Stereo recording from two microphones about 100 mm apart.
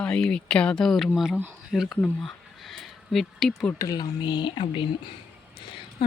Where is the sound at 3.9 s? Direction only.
45° left (ahead or behind).